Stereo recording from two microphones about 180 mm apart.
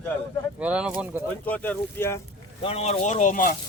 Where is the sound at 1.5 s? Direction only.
10° left (ahead or behind).